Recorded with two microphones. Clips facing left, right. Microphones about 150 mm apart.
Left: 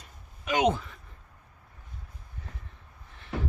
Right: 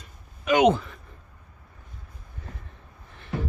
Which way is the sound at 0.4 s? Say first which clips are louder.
Right 6 dB; 75° right (ahead or behind).